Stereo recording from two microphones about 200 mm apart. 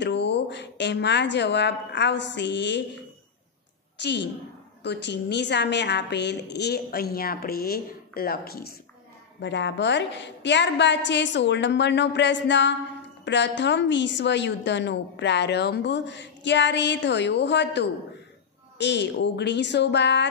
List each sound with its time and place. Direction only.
0.0 s speech: 60° left (ahead or behind)
4.0 s a woman's voice: 60° left (ahead or behind)
9.4 s a woman's voice: 60° left (ahead or behind)